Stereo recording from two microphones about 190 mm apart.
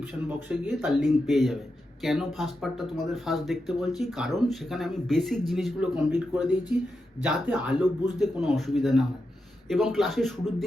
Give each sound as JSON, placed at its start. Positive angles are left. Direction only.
{"t": 0.4, "sound": "speech", "side_deg": -5}